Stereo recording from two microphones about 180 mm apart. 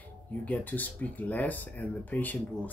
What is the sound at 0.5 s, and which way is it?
Speech, 10° left (ahead or behind).